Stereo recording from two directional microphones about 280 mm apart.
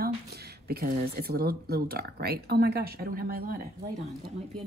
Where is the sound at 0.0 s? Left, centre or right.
Right.